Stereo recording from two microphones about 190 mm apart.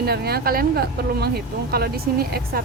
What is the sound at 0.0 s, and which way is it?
A woman's voice, 55° right (ahead or behind).